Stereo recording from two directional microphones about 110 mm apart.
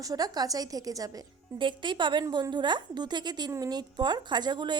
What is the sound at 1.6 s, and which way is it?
A woman's voice, 45° right (ahead or behind).